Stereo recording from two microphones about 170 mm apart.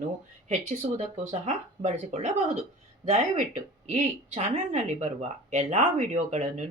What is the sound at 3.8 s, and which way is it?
Speech, 40° right (ahead or behind).